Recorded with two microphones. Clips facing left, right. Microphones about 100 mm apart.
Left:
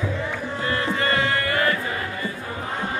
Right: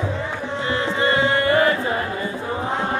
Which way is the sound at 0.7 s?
20° right (ahead or behind).